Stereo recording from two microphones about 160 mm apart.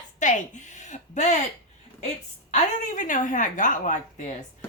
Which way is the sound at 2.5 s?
55° left (ahead or behind).